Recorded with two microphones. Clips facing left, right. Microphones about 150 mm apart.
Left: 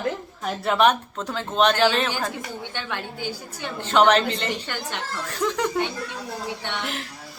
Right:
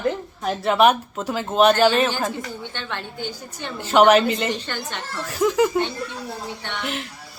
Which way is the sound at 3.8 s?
10° right (ahead or behind).